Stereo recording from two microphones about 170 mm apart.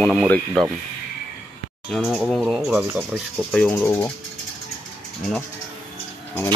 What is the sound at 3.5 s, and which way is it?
Speech, 5° left (ahead or behind).